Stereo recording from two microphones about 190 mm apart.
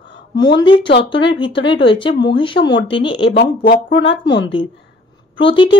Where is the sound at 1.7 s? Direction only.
25° left (ahead or behind).